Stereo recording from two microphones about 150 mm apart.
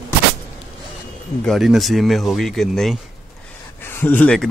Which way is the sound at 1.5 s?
Centre (ahead or behind).